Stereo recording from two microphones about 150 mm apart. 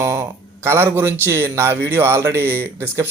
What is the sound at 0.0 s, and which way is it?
A man's voice, 15° right (ahead or behind).